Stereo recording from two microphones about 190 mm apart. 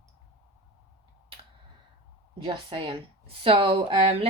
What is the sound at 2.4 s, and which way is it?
Speech, 25° right (ahead or behind).